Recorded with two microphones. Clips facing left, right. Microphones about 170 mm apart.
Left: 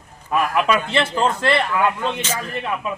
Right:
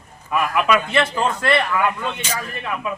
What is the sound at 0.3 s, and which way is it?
A man's voice, 30° left (ahead or behind).